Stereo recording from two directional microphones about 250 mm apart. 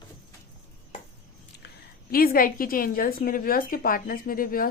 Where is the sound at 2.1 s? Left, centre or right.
Left.